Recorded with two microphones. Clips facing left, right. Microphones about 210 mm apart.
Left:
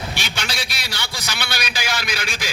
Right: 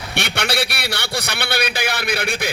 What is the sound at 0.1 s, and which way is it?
A man's voice, 65° right (ahead or behind).